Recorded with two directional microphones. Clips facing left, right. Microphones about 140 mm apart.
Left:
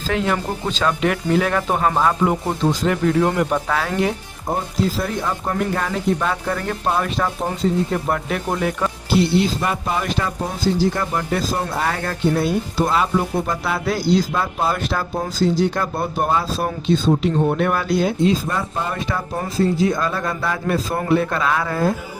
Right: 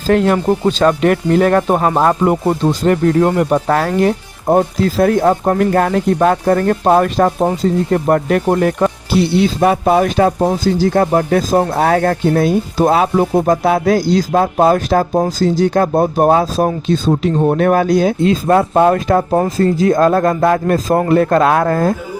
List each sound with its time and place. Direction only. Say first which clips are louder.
0.1 s speech: right 9 dB; 50° right (ahead or behind)
9.6 s speech: right 10 dB; 75° right (ahead or behind)
10.0 s speech: right 11 dB; 50° right (ahead or behind)